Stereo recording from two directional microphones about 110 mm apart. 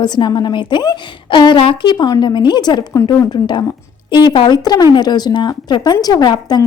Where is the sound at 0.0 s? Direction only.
40° left (ahead or behind).